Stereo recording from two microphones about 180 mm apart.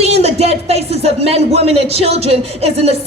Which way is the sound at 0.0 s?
35° right (ahead or behind).